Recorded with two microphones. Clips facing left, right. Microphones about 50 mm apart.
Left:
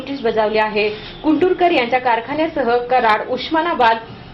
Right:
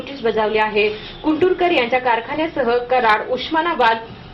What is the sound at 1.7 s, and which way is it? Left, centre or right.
A woman's voice, centre.